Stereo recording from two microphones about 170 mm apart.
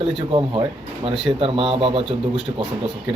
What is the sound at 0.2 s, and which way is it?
A man's voice, 30° right (ahead or behind).